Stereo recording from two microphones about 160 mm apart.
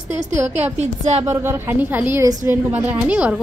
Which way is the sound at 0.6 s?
45° right (ahead or behind).